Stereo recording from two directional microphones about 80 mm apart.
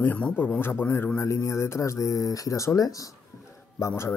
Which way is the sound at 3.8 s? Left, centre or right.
Left.